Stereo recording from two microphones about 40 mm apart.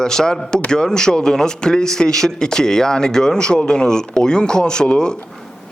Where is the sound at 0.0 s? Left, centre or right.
Centre.